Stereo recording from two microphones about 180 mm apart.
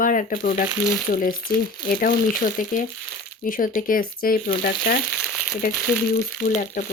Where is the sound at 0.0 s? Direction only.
50° left (ahead or behind).